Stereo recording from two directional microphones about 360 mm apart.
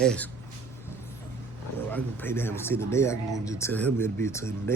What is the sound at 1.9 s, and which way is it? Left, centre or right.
Speech, centre.